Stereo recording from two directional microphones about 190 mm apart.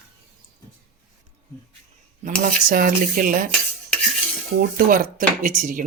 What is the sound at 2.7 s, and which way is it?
Speech, 50° right (ahead or behind).